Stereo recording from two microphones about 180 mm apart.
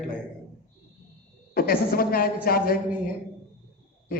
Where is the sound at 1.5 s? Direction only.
55° left (ahead or behind).